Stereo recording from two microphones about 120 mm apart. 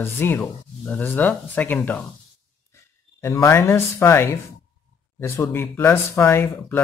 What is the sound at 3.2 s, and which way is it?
Speech, 20° left (ahead or behind).